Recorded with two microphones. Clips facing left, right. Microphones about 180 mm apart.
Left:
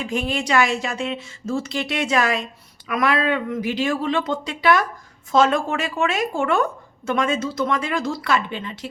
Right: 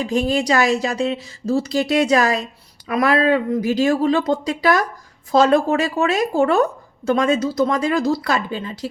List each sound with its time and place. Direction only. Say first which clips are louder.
0.0 s speech: right 5 dB; 40° right (ahead or behind)